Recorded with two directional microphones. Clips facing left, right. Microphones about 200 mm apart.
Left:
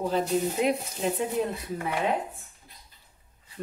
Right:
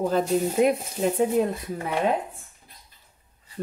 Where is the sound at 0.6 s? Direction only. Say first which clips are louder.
Right 6 dB; 50° right (ahead or behind).